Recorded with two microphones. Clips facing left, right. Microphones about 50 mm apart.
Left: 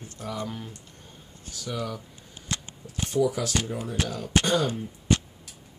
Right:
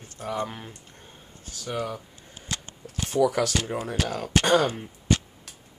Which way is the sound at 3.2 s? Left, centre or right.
Right.